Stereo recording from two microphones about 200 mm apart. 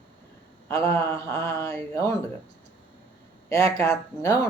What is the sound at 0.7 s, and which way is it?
Speech, 15° left (ahead or behind).